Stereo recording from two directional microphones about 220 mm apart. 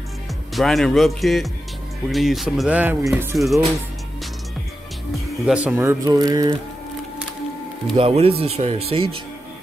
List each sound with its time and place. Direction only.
0.6 s speech: centre (ahead or behind)
5.4 s speech: 5° right (ahead or behind)
7.9 s speech: 25° right (ahead or behind)